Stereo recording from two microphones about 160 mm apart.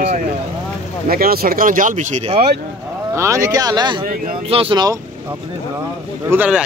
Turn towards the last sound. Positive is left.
turn(degrees=-10)  # may be behind; listen again after turning